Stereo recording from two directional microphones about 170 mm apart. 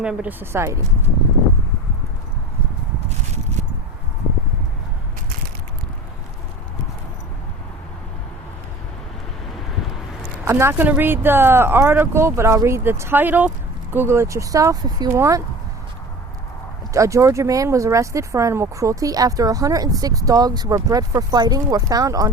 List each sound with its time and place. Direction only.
0.0 s speech: 5° right (ahead or behind)
10.4 s speech: 15° right (ahead or behind)
16.9 s speech: 20° right (ahead or behind)